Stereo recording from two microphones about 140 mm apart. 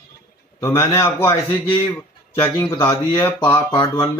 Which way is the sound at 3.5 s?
30° left (ahead or behind).